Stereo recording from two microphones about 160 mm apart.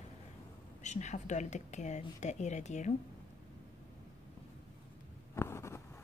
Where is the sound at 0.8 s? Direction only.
45° left (ahead or behind).